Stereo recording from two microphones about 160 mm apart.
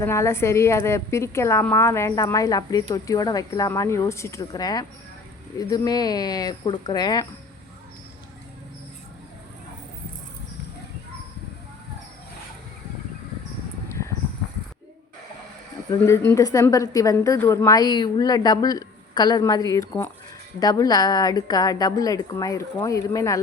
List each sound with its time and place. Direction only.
0.0 s a woman's voice: 15° left (ahead or behind)
16.0 s a woman's voice: 15° left (ahead or behind)